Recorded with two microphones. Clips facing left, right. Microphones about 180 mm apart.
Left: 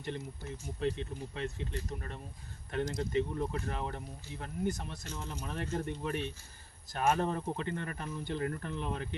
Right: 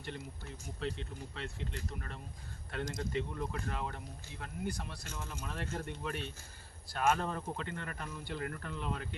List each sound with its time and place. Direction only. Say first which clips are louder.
0.0 s speech: left 4 dB; 20° left (ahead or behind)
2.7 s speech: left 5 dB; 25° left (ahead or behind)